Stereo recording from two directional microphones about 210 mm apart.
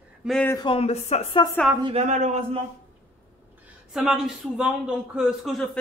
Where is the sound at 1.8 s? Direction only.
30° right (ahead or behind).